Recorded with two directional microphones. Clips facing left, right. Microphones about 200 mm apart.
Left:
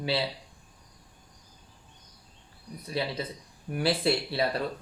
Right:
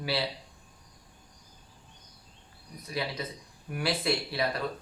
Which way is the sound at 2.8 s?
30° left (ahead or behind).